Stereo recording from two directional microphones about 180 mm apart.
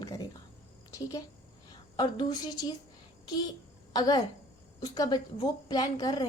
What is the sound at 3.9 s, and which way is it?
A woman's voice, 20° left (ahead or behind).